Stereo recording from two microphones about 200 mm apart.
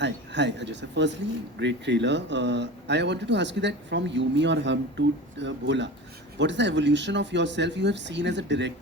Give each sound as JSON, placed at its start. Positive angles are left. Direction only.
{"t": 0.0, "sound": "speech", "side_deg": -60}